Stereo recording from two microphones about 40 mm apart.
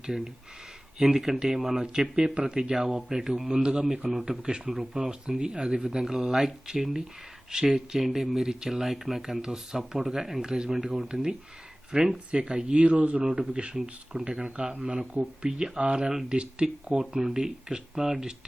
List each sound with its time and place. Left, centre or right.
0.9 s speech: centre
12.8 s speech: right
13.2 s speech: centre